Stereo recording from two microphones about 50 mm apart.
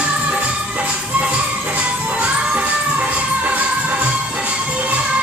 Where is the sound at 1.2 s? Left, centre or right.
Right.